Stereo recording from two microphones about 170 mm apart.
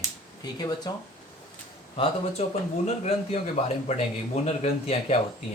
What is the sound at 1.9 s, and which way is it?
Speech, 35° left (ahead or behind).